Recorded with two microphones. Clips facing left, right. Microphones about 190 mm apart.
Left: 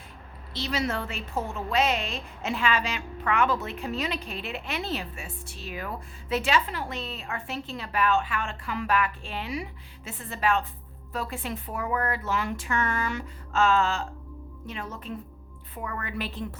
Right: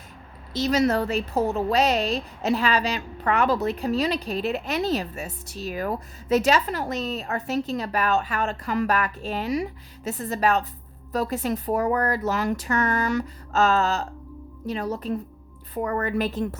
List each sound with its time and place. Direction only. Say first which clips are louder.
0.5 s a woman's voice: right 8 dB; 40° right (ahead or behind)